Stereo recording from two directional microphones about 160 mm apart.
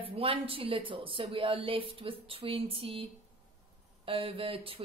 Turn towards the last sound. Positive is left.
turn(degrees=-35)  # may be behind; listen again after turning